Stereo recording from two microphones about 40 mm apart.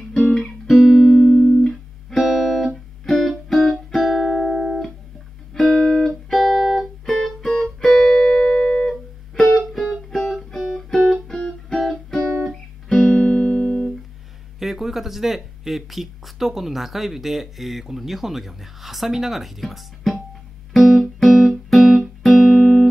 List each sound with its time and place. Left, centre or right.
0.4 s music: centre
0.9 s music: centre
1.7 s music: centre
6.0 s music: centre
9.7 s music: centre
11.8 s music: centre; by 13.8 s left
14.6 s speech: centre
20.8 s music: centre